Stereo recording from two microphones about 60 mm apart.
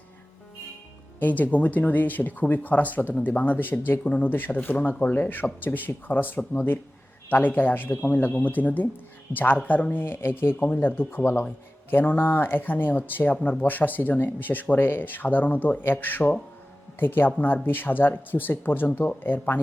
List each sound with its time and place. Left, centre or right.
1.2 s speech: left